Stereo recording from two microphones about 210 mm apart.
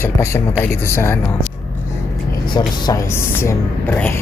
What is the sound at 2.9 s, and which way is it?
Speech, 20° left (ahead or behind).